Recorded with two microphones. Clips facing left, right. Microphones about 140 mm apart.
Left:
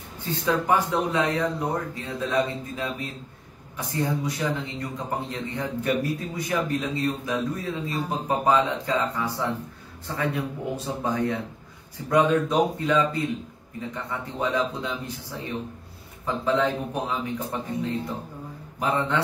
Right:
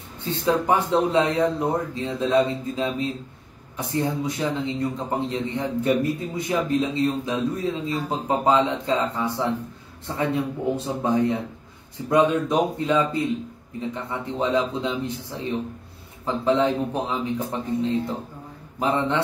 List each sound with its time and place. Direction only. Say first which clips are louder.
0.2 s a man's voice: right 3 dB; 25° right (ahead or behind)
16.3 s a man's voice: right 3 dB; 25° right (ahead or behind)